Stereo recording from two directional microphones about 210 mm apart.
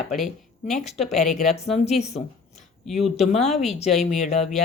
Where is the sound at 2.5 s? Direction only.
Centre (ahead or behind).